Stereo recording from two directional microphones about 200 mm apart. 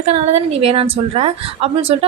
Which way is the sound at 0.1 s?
35° right (ahead or behind).